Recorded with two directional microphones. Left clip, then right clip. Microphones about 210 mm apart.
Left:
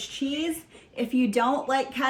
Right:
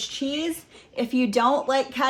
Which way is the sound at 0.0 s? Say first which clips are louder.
Right 3 dB; 35° right (ahead or behind).